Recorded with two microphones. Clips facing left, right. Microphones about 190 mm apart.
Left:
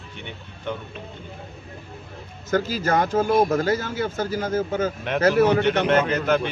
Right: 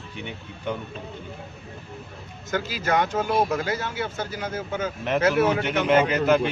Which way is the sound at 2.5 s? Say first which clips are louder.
Left 3 dB; 40° left (ahead or behind).